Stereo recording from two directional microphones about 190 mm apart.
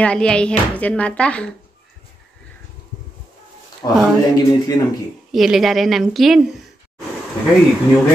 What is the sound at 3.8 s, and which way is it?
Speech, 15° left (ahead or behind).